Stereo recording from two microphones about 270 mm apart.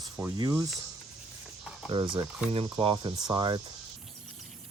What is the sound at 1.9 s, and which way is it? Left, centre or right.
Speech, centre.